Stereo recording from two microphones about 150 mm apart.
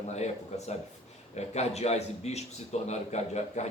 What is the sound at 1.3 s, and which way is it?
Speech, 45° left (ahead or behind).